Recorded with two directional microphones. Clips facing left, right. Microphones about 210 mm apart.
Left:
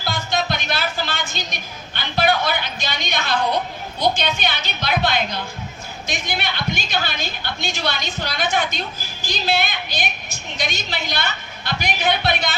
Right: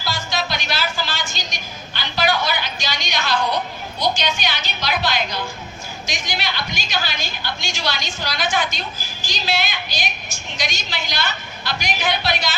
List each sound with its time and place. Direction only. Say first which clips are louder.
0.0 s music: left 2 dB; 55° left (ahead or behind)
4.0 s a woman's voice: left 2 dB; 55° left (ahead or behind)